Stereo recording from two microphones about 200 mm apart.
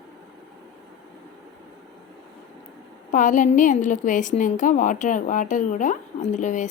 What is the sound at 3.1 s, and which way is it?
A woman's voice, 40° left (ahead or behind).